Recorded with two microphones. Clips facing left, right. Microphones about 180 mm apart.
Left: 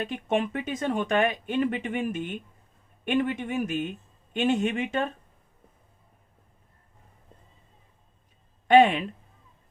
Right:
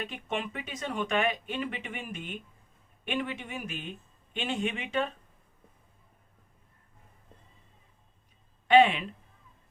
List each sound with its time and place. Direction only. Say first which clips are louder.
0.1 s speech: left 8 dB; 50° left (ahead or behind)
8.6 s speech: left 3 dB; 45° left (ahead or behind)